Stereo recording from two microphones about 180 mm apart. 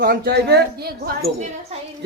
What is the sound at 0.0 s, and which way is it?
Speech, 60° right (ahead or behind).